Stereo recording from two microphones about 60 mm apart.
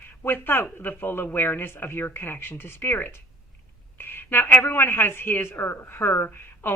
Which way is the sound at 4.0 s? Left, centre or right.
Left.